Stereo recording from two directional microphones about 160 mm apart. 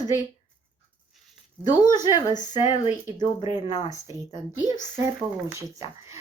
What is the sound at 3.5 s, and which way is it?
Speech, 50° left (ahead or behind).